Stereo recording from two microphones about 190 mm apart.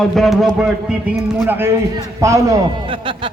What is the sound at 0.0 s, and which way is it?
A man's voice, centre (ahead or behind).